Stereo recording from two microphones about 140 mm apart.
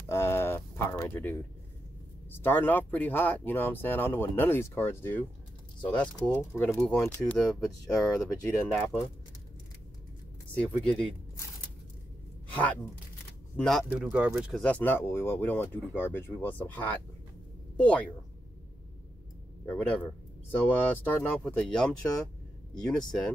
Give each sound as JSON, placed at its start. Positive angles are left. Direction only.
{"t": 0.1, "sound": "a sound", "side_deg": 15}
{"t": 2.3, "sound": "speech", "side_deg": 15}
{"t": 7.4, "sound": "speech", "side_deg": 25}
{"t": 10.6, "sound": "speech", "side_deg": 5}
{"t": 13.6, "sound": "speech", "side_deg": 0}
{"t": 13.8, "sound": "speech", "side_deg": -10}
{"t": 14.6, "sound": "speech", "side_deg": 10}
{"t": 19.6, "sound": "speech", "side_deg": 10}